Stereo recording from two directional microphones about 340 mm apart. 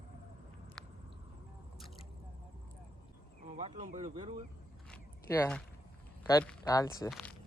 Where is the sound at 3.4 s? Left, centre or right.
Centre.